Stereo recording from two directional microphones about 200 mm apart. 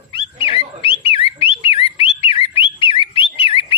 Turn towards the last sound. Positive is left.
turn(degrees=25)  # may be behind; listen again after turning